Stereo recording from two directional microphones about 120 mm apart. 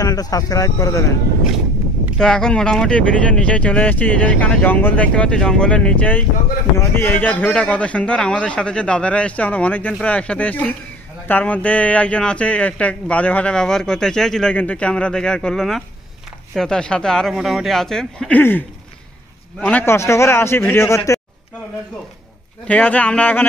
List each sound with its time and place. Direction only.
0.0 s speech: 30° left (ahead or behind)
2.1 s a man's voice: 5° left (ahead or behind)
18.3 s speech: 15° left (ahead or behind)
19.6 s a man's voice: 15° left (ahead or behind)
22.7 s speech: 15° left (ahead or behind)